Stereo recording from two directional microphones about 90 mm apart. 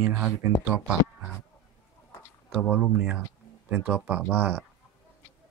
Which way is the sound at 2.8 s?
10° right (ahead or behind).